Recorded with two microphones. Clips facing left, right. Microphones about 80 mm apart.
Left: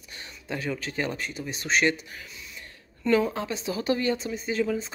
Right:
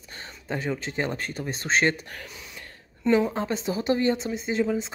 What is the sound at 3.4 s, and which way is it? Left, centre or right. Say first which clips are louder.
Speech: right 3 dB; right.